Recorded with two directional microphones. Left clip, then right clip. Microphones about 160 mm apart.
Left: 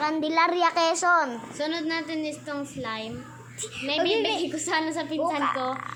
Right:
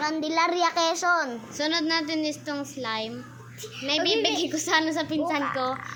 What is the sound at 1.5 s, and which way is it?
A child's voice, 45° right (ahead or behind).